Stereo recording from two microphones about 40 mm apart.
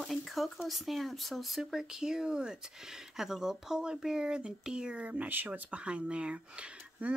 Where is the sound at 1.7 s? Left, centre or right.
Centre; by 5.2 s right.